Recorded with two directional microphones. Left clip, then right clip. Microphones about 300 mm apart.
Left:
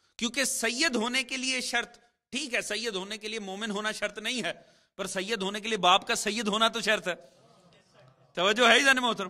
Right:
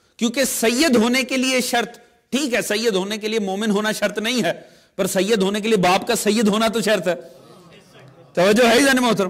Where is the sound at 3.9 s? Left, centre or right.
Right; by 7.2 s centre.